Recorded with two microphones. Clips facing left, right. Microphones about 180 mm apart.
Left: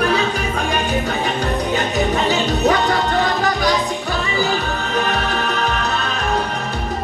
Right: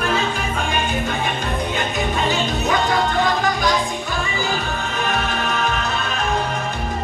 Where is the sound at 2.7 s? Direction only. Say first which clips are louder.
Left 2 dB; 45° left (ahead or behind).